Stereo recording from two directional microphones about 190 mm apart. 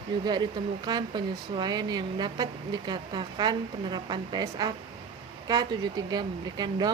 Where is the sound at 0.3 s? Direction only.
20° right (ahead or behind).